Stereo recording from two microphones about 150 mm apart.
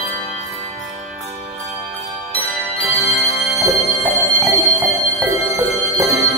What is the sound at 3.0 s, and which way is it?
Music, 40° left (ahead or behind).